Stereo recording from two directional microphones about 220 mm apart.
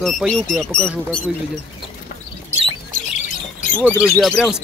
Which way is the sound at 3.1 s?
35° left (ahead or behind).